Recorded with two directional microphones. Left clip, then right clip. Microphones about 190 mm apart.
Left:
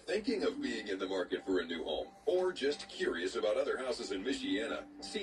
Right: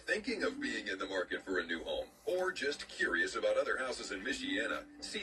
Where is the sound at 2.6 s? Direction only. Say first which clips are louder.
Left 1 dB; 30° right (ahead or behind).